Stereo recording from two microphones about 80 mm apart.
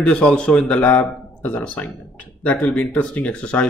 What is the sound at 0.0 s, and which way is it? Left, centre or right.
A man's voice, centre.